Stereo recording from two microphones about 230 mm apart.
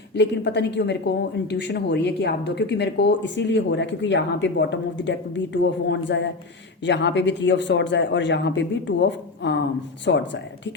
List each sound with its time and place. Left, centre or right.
0.1 s a woman's voice: left